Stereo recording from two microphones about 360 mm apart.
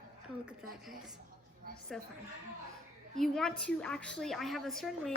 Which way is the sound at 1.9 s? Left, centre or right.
Centre.